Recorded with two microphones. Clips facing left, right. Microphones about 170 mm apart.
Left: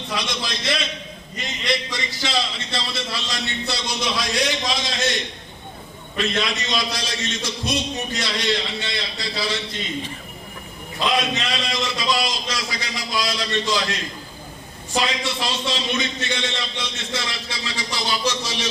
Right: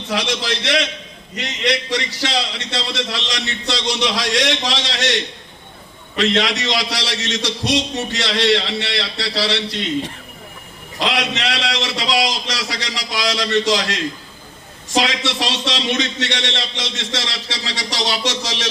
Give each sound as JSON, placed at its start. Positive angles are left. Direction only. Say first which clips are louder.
{"t": 0.1, "sound": "a man's voice", "louder": "right 7 dB", "side_deg": -75}